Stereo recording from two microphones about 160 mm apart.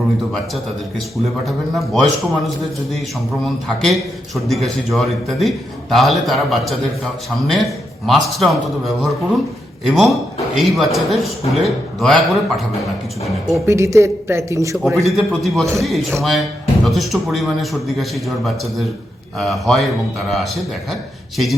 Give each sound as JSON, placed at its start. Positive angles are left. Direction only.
{"t": 1.1, "sound": "a man's voice", "side_deg": 0}
{"t": 13.7, "sound": "a man's voice", "side_deg": -20}
{"t": 15.0, "sound": "a man's voice", "side_deg": 0}